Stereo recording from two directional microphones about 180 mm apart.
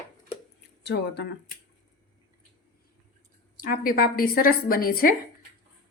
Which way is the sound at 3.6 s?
50° left (ahead or behind).